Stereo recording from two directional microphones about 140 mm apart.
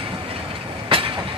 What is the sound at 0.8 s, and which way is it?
Vehicle, 40° right (ahead or behind).